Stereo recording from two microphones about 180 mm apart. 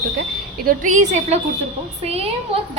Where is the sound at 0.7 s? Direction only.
45° right (ahead or behind).